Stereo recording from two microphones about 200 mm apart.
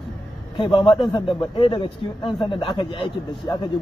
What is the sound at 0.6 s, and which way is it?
A man's voice, 25° left (ahead or behind).